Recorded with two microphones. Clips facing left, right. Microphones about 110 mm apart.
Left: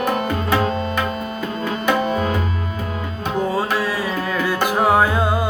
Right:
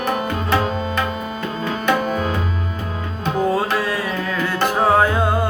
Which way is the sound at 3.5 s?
Centre (ahead or behind).